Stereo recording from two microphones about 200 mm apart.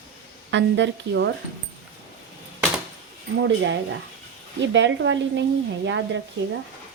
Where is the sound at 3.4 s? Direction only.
60° right (ahead or behind).